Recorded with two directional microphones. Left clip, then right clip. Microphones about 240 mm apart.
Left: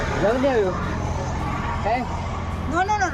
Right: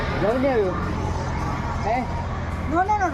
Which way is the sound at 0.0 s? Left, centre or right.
Left.